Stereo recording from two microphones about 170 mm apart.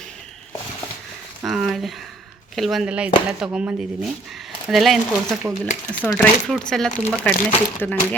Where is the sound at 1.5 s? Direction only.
Centre (ahead or behind).